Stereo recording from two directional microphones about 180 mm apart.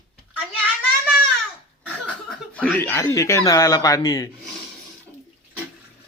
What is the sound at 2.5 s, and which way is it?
Speech, 10° left (ahead or behind).